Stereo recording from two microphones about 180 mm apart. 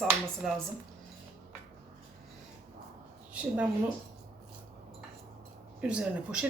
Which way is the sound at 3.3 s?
5° right (ahead or behind).